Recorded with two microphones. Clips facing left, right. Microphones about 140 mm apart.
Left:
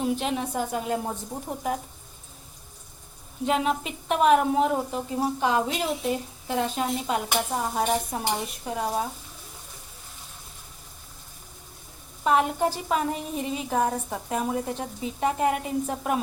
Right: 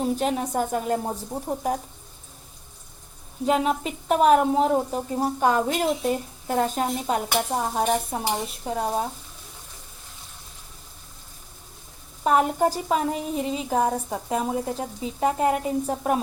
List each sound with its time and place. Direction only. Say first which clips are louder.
0.0 s speech: right 2 dB; 40° right (ahead or behind)
3.4 s a woman's voice: right 2 dB; 35° right (ahead or behind)
12.2 s speech: right 2 dB; 40° right (ahead or behind)
13.1 s speech: right 3 dB; 25° right (ahead or behind)